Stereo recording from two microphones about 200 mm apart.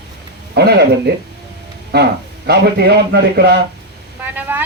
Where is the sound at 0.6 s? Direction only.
55° right (ahead or behind).